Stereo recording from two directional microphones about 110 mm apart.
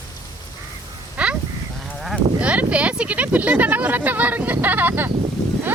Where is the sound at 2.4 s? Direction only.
10° right (ahead or behind).